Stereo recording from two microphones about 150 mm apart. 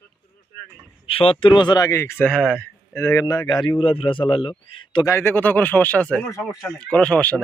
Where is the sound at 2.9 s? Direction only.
20° left (ahead or behind).